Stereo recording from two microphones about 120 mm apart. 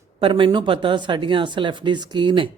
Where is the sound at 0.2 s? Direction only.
45° right (ahead or behind).